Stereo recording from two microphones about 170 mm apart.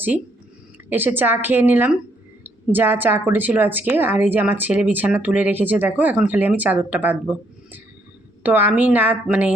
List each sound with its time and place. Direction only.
0.9 s speech: 10° right (ahead or behind)
8.4 s speech: 10° right (ahead or behind)